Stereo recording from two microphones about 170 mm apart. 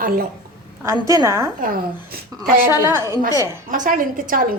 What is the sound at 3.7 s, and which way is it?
Speech, 50° right (ahead or behind).